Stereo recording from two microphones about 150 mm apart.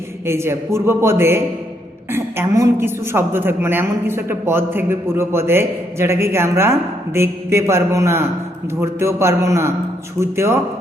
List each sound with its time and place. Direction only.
0.3 s a woman's voice: 15° right (ahead or behind)